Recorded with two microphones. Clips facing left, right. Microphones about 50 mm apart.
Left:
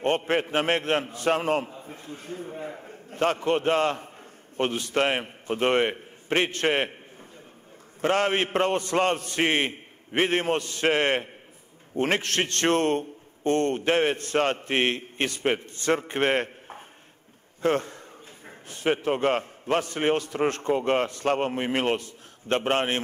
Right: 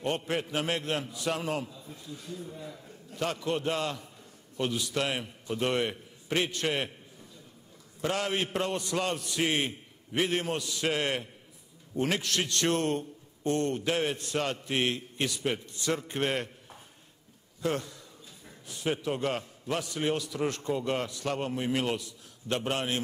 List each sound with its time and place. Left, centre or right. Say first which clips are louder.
0.0 s a man's voice: left 7 dB; left
8.0 s a man's voice: left 7 dB; left